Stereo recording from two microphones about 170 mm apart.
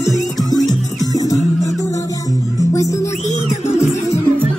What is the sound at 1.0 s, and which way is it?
Music, 20° left (ahead or behind).